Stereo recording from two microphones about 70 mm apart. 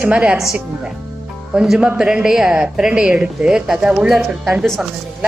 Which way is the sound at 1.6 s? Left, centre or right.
Centre.